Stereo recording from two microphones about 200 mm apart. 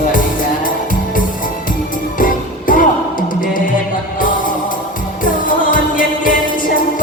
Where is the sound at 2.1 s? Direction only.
40° left (ahead or behind).